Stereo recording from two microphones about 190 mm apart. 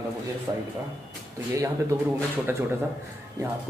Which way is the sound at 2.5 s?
10° right (ahead or behind).